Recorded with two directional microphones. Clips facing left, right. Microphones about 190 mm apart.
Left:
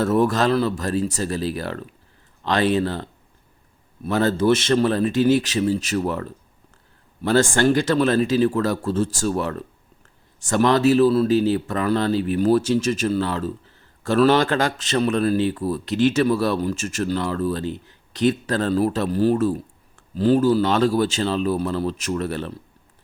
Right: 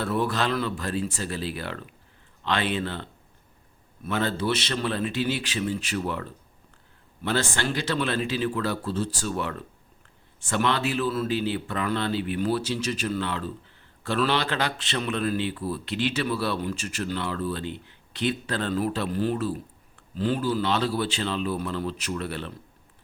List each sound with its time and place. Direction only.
0.0 s speech: 45° left (ahead or behind)
13.1 s speech: 35° left (ahead or behind)